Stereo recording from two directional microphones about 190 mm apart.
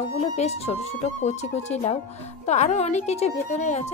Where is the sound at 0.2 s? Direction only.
35° left (ahead or behind).